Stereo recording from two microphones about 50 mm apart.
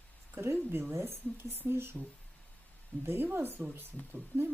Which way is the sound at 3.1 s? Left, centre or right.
Right.